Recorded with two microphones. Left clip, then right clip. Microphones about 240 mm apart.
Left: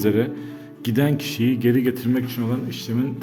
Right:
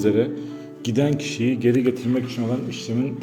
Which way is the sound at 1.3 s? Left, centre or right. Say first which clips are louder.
Even; left.